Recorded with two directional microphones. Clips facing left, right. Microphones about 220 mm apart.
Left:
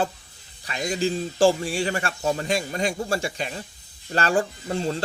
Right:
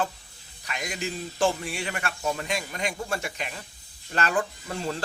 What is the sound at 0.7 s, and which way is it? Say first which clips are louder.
A man's voice: left 8 dB; 30° left (ahead or behind).